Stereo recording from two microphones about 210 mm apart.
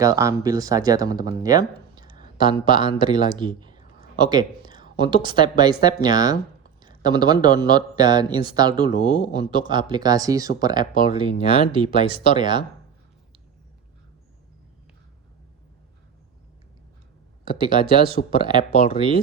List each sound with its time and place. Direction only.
0.0 s speech: 15° right (ahead or behind)
6.8 s a sound: 20° right (ahead or behind)
7.4 s speech: 20° right (ahead or behind)
17.6 s speech: 25° right (ahead or behind)